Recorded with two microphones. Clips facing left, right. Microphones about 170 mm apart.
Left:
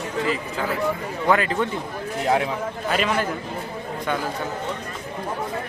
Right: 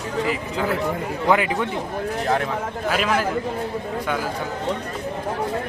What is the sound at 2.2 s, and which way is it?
Speech, 15° left (ahead or behind).